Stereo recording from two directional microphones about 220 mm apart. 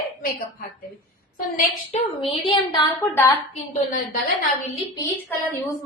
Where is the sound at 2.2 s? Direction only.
25° left (ahead or behind).